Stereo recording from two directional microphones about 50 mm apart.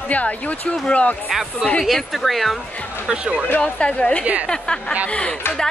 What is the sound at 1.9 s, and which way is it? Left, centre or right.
Speech, centre.